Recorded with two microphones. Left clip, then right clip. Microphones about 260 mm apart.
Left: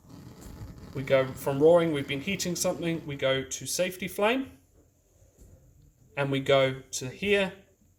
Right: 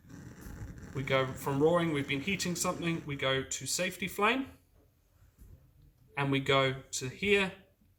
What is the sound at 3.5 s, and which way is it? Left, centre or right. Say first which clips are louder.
Speech: left 5 dB; right.